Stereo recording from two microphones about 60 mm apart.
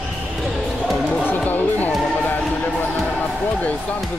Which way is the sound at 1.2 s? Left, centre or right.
Left.